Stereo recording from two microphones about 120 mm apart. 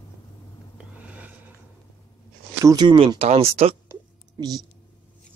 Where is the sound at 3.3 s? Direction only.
60° right (ahead or behind).